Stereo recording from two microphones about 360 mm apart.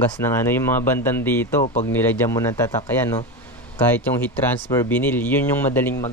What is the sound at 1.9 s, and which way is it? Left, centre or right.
Speech, centre.